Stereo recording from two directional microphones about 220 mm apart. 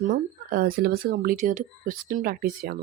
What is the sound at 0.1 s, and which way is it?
Speech, 40° right (ahead or behind).